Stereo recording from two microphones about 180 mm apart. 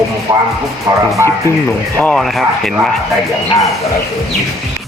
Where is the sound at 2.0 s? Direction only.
5° left (ahead or behind).